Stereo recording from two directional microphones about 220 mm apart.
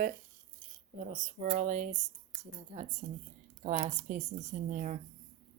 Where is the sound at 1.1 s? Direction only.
35° right (ahead or behind).